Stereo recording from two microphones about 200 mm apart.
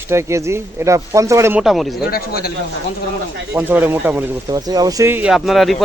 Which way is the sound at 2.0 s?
50° left (ahead or behind).